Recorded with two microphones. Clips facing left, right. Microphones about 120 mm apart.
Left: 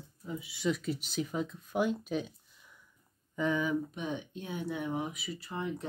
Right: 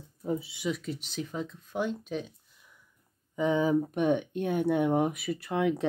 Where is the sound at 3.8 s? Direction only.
55° right (ahead or behind).